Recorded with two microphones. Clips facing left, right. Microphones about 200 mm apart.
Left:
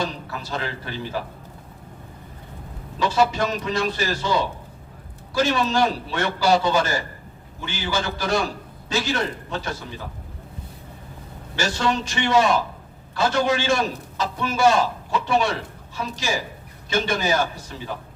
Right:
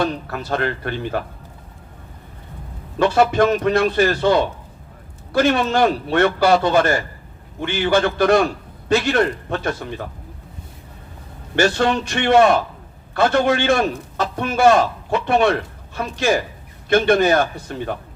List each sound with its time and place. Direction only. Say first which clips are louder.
0.0 s a man's voice: right 6 dB; 60° right (ahead or behind)
3.0 s a man's voice: right 6 dB; 60° right (ahead or behind)
11.5 s a man's voice: right 6 dB; 60° right (ahead or behind)